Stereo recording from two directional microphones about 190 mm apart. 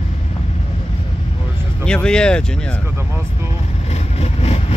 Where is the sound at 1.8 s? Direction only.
5° left (ahead or behind).